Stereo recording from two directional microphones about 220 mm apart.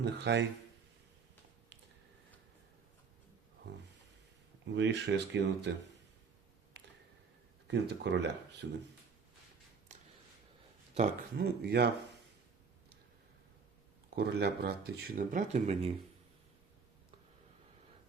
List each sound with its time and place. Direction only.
0.0 s speech: 55° right (ahead or behind)
4.6 s speech: 55° right (ahead or behind)
7.7 s speech: 50° right (ahead or behind)
10.9 s speech: 30° right (ahead or behind)
11.6 s speech: 45° right (ahead or behind)
14.2 s speech: 50° right (ahead or behind); by 15.9 s 30° right (ahead or behind)